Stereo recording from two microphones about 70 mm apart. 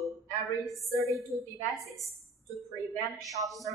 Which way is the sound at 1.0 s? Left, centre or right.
Right.